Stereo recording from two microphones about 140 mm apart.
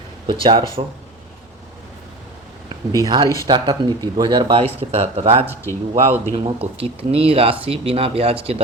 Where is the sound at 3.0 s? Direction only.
30° right (ahead or behind).